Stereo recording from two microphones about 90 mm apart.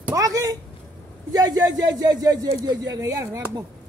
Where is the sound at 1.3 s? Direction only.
45° right (ahead or behind).